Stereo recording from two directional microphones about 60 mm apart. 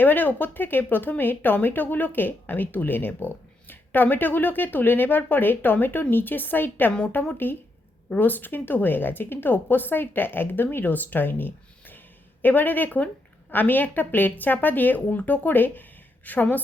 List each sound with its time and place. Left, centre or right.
0.0 s speech: left